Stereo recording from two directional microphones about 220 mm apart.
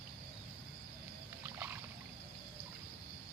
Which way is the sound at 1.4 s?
10° right (ahead or behind).